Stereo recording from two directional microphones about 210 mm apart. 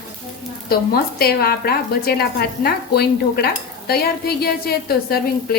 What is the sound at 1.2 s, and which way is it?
A woman's voice, 45° left (ahead or behind).